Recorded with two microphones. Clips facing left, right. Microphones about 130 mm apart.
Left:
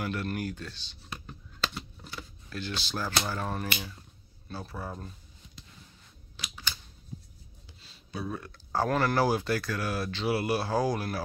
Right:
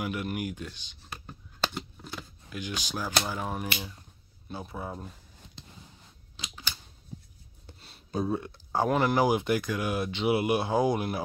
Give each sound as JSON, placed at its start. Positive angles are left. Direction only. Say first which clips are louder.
{"t": 0.0, "sound": "speech", "louder": "right 1 dB", "side_deg": -15}
{"t": 2.5, "sound": "speech", "louder": "even", "side_deg": -15}
{"t": 7.6, "sound": "a sound", "louder": "right 8 dB", "side_deg": -55}
{"t": 8.3, "sound": "speech", "louder": "right 5 dB", "side_deg": -25}